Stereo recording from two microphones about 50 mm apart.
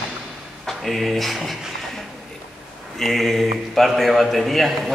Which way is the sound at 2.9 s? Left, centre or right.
Centre.